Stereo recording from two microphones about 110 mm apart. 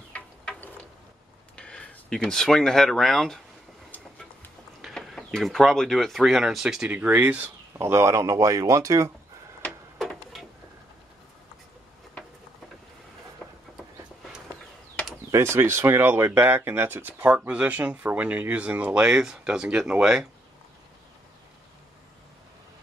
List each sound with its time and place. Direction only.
0.1 s a sound: 10° left (ahead or behind)
1.6 s speech: 10° left (ahead or behind)
3.9 s train: 15° left (ahead or behind)
4.8 s speech: centre (ahead or behind)
6.9 s speech: 15° right (ahead or behind)
7.7 s speech: 25° right (ahead or behind)
9.9 s printer: centre (ahead or behind)
15.3 s speech: 25° right (ahead or behind); by 20.2 s 10° right (ahead or behind)